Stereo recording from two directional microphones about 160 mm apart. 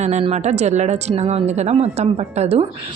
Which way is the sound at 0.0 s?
45° right (ahead or behind).